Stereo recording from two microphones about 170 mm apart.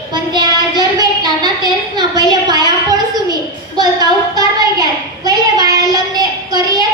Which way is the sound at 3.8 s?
25° right (ahead or behind).